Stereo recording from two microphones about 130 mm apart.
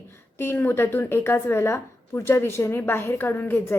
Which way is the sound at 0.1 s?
15° left (ahead or behind).